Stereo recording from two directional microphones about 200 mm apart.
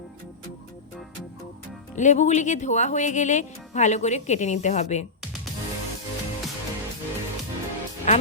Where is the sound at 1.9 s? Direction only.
35° left (ahead or behind).